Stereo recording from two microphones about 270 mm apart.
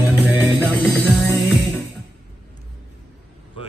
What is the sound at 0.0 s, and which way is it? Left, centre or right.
Music, centre.